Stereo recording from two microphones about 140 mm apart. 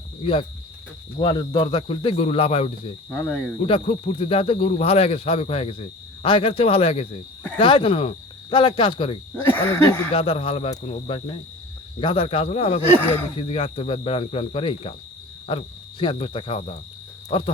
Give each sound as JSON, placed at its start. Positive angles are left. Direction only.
{"t": 0.2, "sound": "a man's voice", "side_deg": 40}
{"t": 3.1, "sound": "speech", "side_deg": 15}
{"t": 3.6, "sound": "a man's voice", "side_deg": 40}
{"t": 9.4, "sound": "speech", "side_deg": 15}
{"t": 10.1, "sound": "a man's voice", "side_deg": 40}